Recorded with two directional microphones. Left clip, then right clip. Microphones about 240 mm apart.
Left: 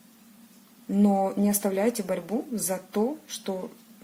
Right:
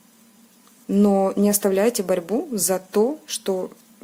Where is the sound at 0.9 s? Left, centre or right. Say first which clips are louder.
Right 6 dB; right.